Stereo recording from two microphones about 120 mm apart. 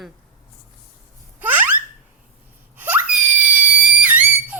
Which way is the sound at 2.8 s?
15° right (ahead or behind).